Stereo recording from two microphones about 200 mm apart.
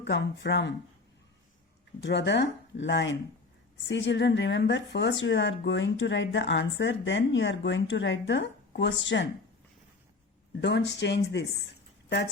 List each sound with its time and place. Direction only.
0.0 s speech: 60° left (ahead or behind)
2.0 s speech: 60° left (ahead or behind)
10.6 s speech: 60° left (ahead or behind)